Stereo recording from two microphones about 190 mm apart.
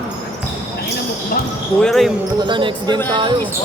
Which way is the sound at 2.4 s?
25° right (ahead or behind).